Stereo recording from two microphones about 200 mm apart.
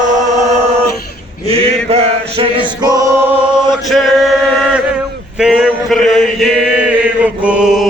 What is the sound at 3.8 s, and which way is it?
Male singing, centre (ahead or behind).